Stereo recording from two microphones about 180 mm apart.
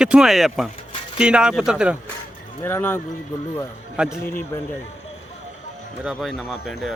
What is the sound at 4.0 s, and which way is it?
Speech, 5° right (ahead or behind).